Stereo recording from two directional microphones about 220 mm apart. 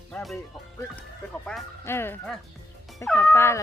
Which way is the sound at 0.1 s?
Centre (ahead or behind).